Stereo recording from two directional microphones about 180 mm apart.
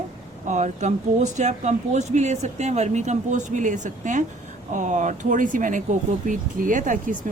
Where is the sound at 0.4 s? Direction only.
40° right (ahead or behind).